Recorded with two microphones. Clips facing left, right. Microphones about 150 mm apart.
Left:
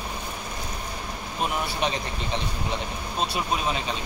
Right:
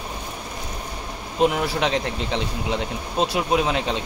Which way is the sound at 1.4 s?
90° right.